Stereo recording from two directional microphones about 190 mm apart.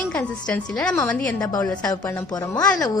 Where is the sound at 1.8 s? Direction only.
15° left (ahead or behind).